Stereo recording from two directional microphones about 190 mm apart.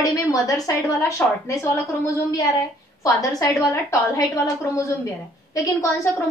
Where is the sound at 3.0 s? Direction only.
20° left (ahead or behind).